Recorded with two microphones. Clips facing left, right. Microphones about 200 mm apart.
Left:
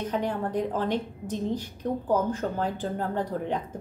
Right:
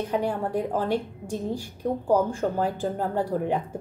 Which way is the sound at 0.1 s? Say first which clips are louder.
Right 2 dB; 10° right (ahead or behind).